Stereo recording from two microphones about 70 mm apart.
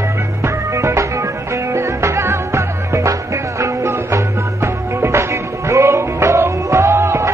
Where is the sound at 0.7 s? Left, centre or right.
Right.